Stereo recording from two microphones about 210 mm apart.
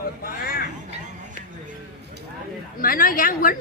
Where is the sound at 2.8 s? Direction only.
45° left (ahead or behind).